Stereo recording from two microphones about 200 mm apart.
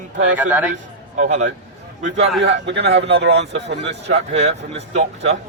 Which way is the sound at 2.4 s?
60° right (ahead or behind).